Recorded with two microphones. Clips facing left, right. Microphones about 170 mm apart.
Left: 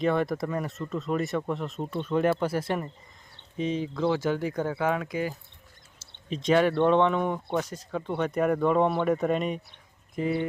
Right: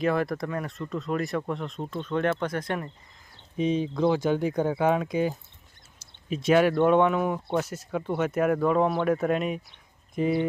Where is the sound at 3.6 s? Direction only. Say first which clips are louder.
Right 3 dB; 15° right (ahead or behind).